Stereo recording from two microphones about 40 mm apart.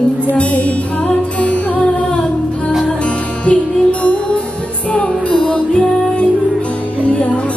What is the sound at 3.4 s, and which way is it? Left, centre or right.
Music, left.